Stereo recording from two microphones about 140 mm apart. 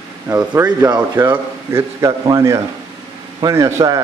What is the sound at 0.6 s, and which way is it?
A man's voice, 20° right (ahead or behind).